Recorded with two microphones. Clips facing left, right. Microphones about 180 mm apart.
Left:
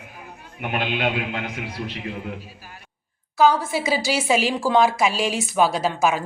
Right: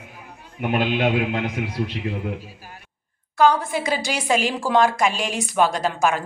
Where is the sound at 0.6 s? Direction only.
25° right (ahead or behind).